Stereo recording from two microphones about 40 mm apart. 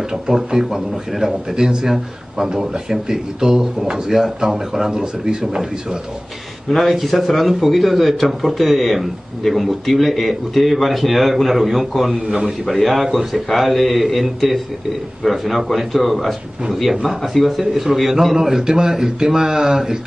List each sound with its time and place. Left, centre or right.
0.4 s speech: centre